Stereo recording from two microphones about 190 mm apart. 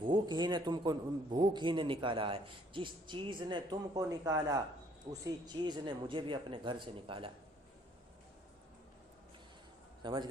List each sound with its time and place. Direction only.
0.0 s a man's voice: 25° right (ahead or behind)
10.0 s a man's voice: 25° right (ahead or behind)